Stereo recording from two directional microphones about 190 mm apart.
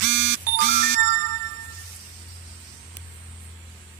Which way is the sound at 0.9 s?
40° right (ahead or behind).